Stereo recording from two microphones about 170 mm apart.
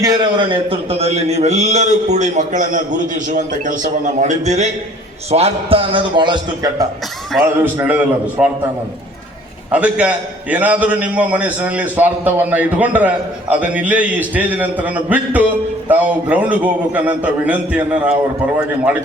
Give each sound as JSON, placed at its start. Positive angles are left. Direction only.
{"t": 0.0, "sound": "a man's voice", "side_deg": -25}
{"t": 7.4, "sound": "a man's voice", "side_deg": -10}
{"t": 9.7, "sound": "a man's voice", "side_deg": -10}